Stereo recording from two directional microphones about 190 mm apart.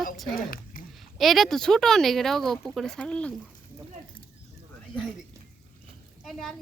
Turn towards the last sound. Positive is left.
turn(degrees=0)  # may be behind; listen again after turning